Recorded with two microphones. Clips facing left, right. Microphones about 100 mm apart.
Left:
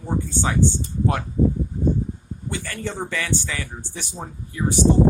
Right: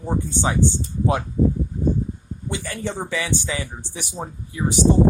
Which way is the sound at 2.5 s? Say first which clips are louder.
Right 2 dB; 15° right (ahead or behind).